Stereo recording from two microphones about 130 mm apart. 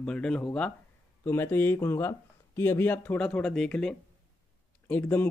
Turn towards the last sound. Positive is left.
turn(degrees=15)  # may be behind; listen again after turning